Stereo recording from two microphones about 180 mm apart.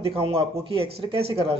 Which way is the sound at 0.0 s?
30° right (ahead or behind).